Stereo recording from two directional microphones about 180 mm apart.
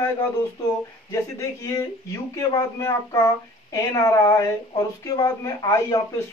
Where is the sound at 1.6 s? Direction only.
20° left (ahead or behind).